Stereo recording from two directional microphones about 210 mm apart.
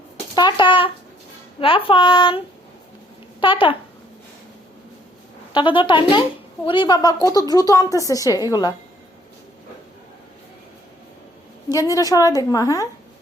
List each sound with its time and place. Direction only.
0.3 s speech: 20° left (ahead or behind)
3.4 s speech: 25° left (ahead or behind)
5.5 s a woman's voice: 25° left (ahead or behind)
11.7 s a woman's voice: 15° left (ahead or behind)